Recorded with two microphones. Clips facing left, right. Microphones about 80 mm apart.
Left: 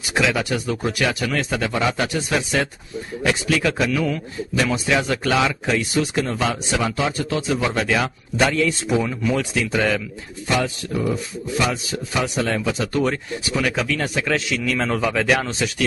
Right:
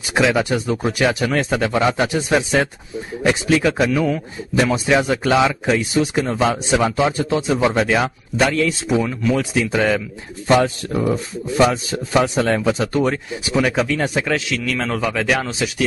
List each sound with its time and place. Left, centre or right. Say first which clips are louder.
0.1 s a man's voice: right 4 dB; right
8.4 s speech: right 1 dB; centre
10.5 s a man's voice: right 6 dB; right
14.5 s speech: even; centre